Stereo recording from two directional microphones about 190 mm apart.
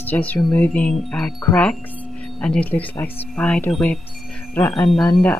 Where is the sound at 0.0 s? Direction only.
10° left (ahead or behind).